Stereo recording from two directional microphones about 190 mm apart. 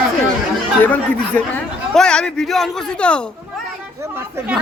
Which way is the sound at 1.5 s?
5° left (ahead or behind).